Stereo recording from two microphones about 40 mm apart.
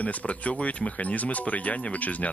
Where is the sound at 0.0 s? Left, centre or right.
Left.